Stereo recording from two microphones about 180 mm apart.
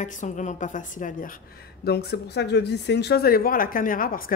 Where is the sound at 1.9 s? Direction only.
65° left (ahead or behind).